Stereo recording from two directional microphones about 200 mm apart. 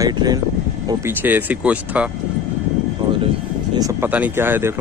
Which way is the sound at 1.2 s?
10° right (ahead or behind).